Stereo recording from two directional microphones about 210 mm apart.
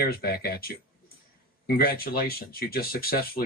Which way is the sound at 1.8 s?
45° left (ahead or behind).